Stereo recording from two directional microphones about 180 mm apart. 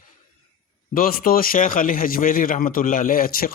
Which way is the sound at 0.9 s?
55° left (ahead or behind).